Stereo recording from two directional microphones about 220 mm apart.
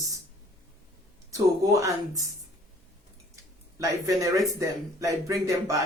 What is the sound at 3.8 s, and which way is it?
Speech, 15° right (ahead or behind).